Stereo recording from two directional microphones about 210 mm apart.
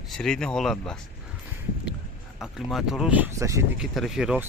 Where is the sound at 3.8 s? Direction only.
Centre (ahead or behind).